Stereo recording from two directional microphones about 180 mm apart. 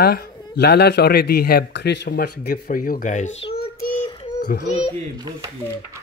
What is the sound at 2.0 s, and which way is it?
Speech, 55° left (ahead or behind).